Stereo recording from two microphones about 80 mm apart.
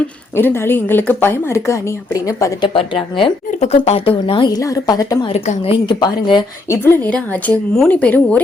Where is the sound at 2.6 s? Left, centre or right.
Left.